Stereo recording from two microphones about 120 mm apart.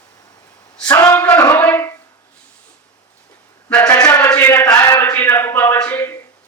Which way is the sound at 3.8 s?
30° left (ahead or behind).